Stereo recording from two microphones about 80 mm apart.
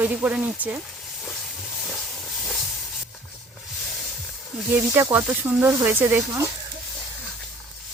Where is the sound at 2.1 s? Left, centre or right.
Centre.